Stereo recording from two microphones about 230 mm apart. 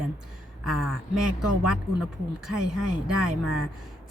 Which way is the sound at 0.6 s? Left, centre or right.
Centre.